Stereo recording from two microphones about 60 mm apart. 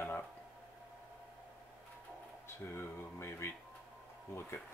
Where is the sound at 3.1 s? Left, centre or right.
Left.